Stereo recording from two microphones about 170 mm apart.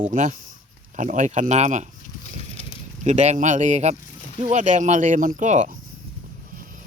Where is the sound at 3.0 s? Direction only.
45° right (ahead or behind).